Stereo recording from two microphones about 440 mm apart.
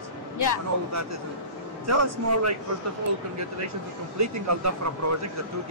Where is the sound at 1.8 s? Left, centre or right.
Right.